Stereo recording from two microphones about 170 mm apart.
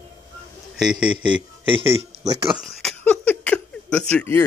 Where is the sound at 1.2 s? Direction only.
30° right (ahead or behind).